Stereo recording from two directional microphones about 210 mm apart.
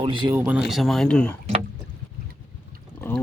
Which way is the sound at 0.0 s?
20° right (ahead or behind).